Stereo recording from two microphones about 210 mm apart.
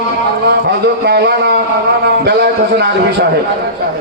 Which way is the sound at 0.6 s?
50° right (ahead or behind).